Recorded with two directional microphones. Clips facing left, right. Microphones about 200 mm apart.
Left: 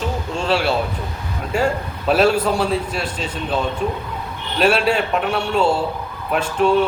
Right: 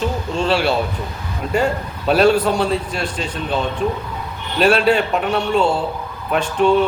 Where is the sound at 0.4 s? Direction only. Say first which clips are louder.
Right 1 dB; 5° left (ahead or behind).